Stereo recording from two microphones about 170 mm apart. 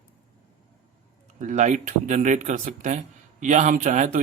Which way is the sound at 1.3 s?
45° right (ahead or behind).